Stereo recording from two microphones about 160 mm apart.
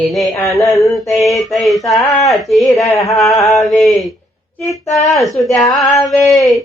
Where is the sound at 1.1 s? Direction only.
20° left (ahead or behind).